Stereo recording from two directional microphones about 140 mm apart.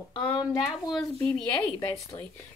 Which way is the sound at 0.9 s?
5° left (ahead or behind).